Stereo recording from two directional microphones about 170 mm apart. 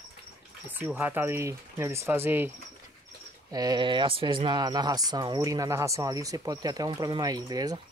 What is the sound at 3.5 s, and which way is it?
Speech, 25° right (ahead or behind).